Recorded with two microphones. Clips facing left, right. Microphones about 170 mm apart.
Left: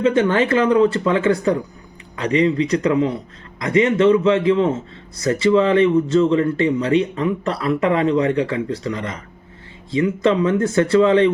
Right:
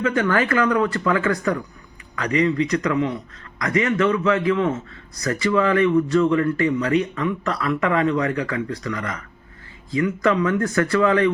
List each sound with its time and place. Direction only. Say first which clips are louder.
0.0 s a man's voice: left 4 dB; 25° left (ahead or behind)